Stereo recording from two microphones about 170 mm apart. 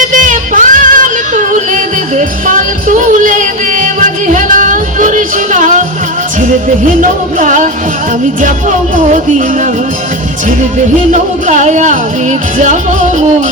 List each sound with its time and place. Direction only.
0.1 s music: 50° right (ahead or behind)
7.0 s music: 50° right (ahead or behind)
11.1 s music: 45° right (ahead or behind)